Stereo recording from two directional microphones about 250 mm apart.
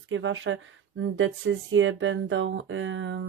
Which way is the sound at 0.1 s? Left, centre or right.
Right.